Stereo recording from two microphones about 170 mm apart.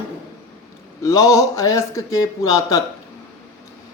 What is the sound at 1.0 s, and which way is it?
Speech, 20° left (ahead or behind).